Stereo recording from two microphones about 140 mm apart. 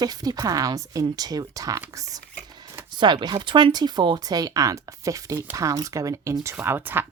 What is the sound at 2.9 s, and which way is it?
Speech, 35° right (ahead or behind).